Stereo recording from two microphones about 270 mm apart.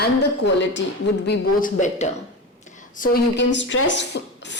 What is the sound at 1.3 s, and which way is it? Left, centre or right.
Speech, left.